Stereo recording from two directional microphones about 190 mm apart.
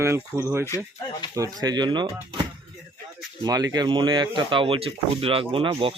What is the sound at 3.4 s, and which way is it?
Speech, 20° right (ahead or behind).